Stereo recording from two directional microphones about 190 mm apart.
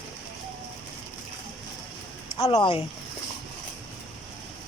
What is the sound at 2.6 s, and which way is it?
Speech, 30° left (ahead or behind).